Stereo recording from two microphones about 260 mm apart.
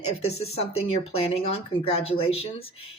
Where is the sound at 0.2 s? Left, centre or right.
Left.